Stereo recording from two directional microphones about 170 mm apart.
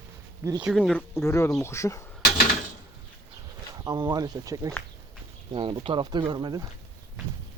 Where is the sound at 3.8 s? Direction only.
25° right (ahead or behind).